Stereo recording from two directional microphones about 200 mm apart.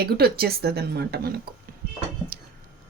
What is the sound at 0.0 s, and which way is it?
A woman's voice, 50° right (ahead or behind).